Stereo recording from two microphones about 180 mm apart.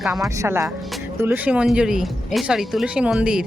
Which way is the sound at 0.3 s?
15° right (ahead or behind).